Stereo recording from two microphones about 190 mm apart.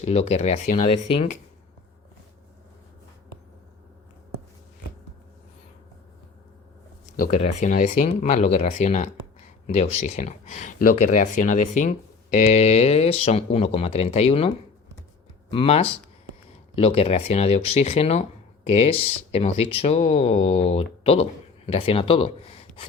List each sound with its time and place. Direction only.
0.0 s speech: 35° left (ahead or behind)
7.3 s speech: 40° left (ahead or behind)